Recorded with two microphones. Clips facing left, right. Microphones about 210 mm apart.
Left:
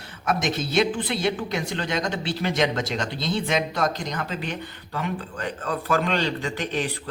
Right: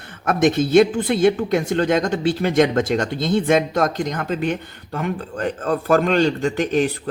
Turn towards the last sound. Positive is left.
turn(degrees=-45)  # may be behind; listen again after turning